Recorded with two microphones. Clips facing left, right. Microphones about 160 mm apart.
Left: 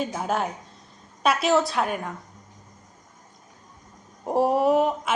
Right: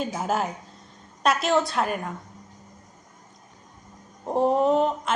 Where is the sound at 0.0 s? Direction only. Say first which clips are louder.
Even; centre (ahead or behind).